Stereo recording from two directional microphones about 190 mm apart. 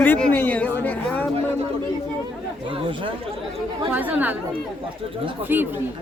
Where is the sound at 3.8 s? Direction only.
10° right (ahead or behind).